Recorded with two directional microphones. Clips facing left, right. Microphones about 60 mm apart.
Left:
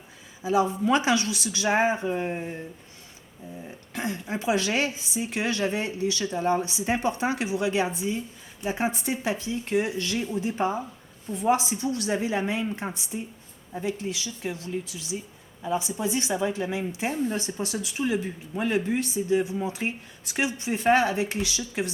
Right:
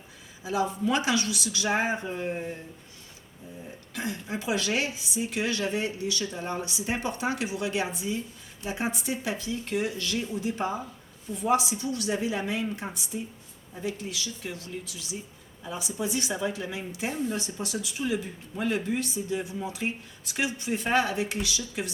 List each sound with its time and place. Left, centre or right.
0.9 s a woman's voice: left
3.9 s a woman's voice: left